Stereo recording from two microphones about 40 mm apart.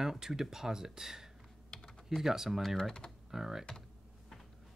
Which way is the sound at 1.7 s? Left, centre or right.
Centre.